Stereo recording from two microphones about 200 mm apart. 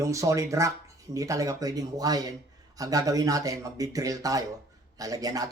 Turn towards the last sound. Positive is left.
turn(degrees=-20)  # may be behind; listen again after turning